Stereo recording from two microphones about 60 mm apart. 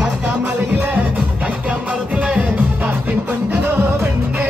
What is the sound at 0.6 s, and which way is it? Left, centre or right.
Music, right.